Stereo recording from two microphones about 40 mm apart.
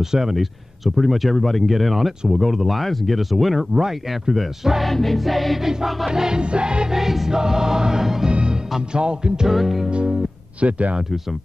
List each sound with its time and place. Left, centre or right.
0.0 s speech: centre
6.0 s music: centre
7.0 s music: centre
8.3 s music: right
9.5 s speech: centre
9.8 s speech: right